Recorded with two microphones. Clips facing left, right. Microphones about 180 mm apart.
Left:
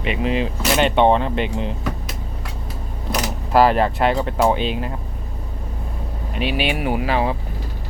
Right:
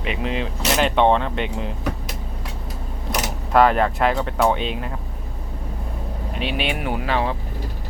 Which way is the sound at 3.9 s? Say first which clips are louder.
Left 2 dB; centre (ahead or behind).